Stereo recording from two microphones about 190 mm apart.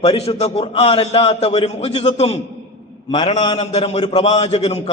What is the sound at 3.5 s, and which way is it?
A man's voice, 35° left (ahead or behind).